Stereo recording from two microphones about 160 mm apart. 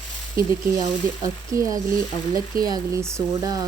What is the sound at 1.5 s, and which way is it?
Speech, 20° right (ahead or behind).